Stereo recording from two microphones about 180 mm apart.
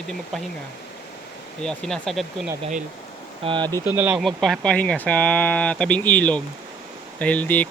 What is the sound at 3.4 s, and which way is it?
Speech, 25° right (ahead or behind).